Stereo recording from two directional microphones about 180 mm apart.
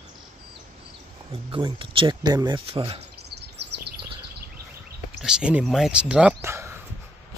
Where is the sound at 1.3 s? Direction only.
30° right (ahead or behind).